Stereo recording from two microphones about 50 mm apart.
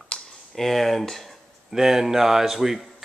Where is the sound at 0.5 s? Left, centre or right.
Centre.